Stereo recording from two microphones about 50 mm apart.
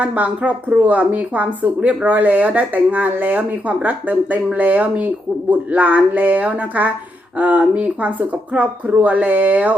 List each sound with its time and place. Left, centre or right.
0.0 s speech: right